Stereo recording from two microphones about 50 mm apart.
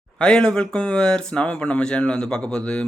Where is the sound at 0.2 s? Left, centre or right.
Centre.